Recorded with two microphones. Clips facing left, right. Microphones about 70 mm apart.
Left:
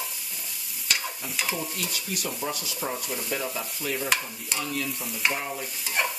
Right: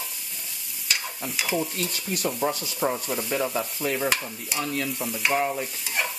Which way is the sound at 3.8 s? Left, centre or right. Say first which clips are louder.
Right 4 dB; right.